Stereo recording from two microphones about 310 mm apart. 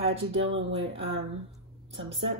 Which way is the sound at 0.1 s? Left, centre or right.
Right.